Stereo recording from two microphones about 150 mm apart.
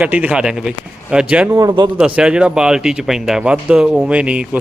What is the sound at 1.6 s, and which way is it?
Speech, 30° right (ahead or behind).